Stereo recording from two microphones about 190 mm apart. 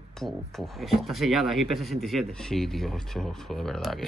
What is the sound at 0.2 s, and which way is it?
Speech, centre (ahead or behind).